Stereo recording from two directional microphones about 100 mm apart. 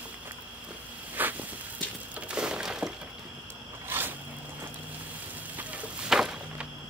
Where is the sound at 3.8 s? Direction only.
20° right (ahead or behind).